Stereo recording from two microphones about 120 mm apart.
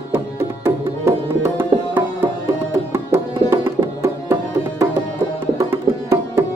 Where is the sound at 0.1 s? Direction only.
20° right (ahead or behind).